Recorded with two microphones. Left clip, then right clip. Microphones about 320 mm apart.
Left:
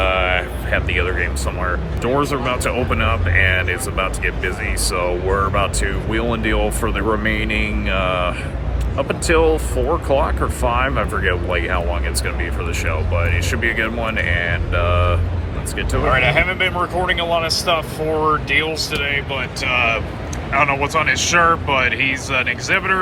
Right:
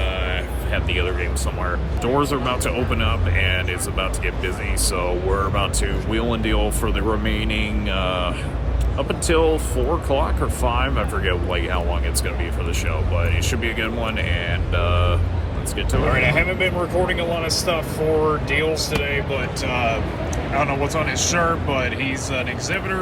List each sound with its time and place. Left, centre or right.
0.0 s vehicle: centre
0.7 s speech: centre